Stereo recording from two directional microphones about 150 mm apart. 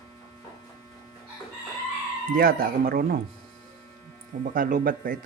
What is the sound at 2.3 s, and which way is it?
Speech, 70° right (ahead or behind).